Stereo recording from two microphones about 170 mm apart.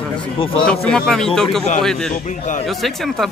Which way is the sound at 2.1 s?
45° left (ahead or behind).